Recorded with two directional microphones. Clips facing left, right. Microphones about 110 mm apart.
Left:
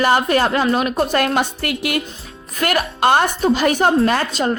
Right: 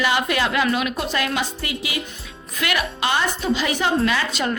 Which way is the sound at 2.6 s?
45° left (ahead or behind).